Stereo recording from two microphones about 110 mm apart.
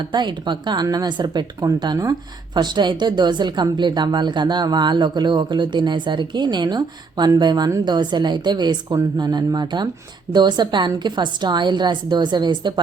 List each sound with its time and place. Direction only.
0.1 s a woman's voice: 45° right (ahead or behind)